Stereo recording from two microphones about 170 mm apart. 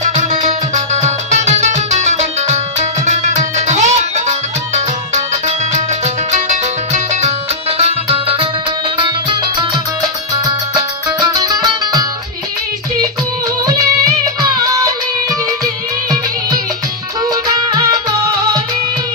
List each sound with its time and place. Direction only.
0.0 s music: 45° right (ahead or behind); by 9.8 s 25° right (ahead or behind)
11.2 s music: 20° right (ahead or behind)
13.7 s music: 20° right (ahead or behind)
17.2 s music: 20° right (ahead or behind)